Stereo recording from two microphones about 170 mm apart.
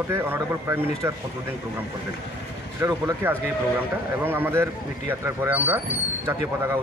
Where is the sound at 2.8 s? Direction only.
15° right (ahead or behind).